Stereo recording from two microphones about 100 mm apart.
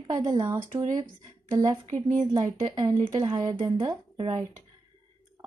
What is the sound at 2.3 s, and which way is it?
Speech, 45° right (ahead or behind).